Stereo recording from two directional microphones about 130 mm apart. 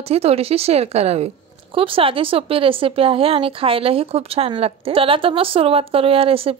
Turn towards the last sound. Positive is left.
turn(degrees=-45)  # may be behind; listen again after turning